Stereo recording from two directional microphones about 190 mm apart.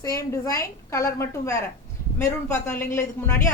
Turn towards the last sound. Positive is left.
turn(degrees=10)  # may be behind; listen again after turning